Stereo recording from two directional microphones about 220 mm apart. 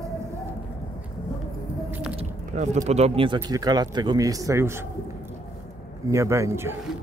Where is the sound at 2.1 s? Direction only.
30° right (ahead or behind).